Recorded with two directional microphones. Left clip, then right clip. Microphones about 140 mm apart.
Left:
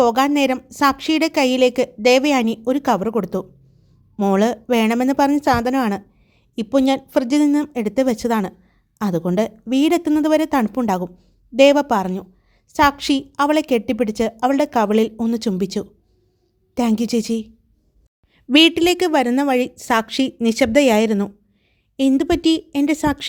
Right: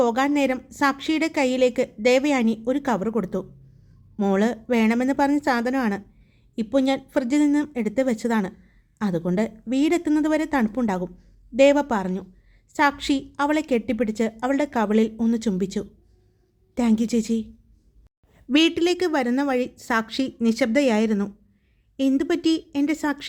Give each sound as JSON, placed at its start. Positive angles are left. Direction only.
{"t": 0.0, "sound": "a woman's voice", "side_deg": 35}